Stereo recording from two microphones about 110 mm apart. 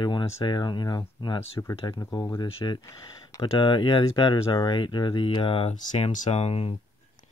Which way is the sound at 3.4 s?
50° left (ahead or behind).